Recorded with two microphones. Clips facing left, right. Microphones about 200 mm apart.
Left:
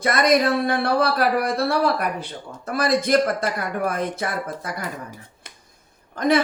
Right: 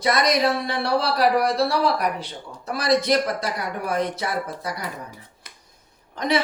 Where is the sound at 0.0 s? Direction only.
50° left (ahead or behind).